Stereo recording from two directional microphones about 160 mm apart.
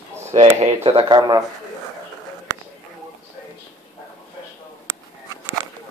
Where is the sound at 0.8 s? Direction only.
30° right (ahead or behind).